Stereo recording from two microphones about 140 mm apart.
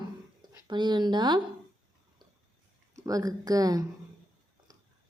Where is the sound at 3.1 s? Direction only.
25° right (ahead or behind).